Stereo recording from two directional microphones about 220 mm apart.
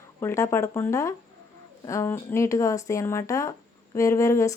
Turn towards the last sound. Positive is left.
turn(degrees=15)  # may be behind; listen again after turning